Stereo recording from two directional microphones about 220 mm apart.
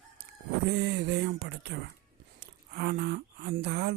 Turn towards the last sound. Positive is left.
turn(degrees=-50)  # may be behind; listen again after turning